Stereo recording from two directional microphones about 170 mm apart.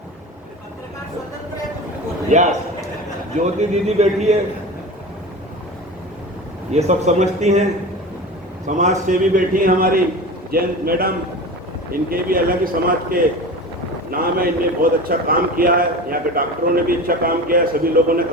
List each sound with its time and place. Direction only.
2.3 s a man's voice: 45° right (ahead or behind)
6.7 s a man's voice: 40° right (ahead or behind); by 11.1 s 60° right (ahead or behind)
12.1 s a man's voice: 55° right (ahead or behind)